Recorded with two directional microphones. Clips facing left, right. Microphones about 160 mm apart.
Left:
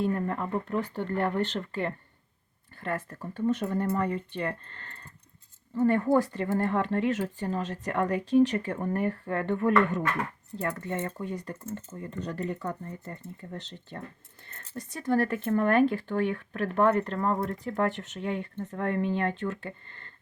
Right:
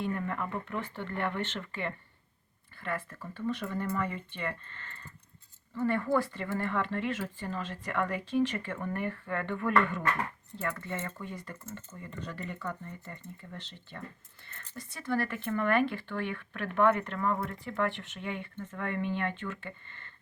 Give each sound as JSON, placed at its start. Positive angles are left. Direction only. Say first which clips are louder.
{"t": 0.0, "sound": "speech", "louder": "left 5 dB", "side_deg": 35}